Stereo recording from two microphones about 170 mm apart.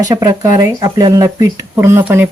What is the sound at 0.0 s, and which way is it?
Speech, 20° right (ahead or behind).